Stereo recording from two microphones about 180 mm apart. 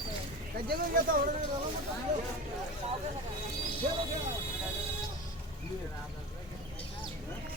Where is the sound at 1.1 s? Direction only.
50° right (ahead or behind).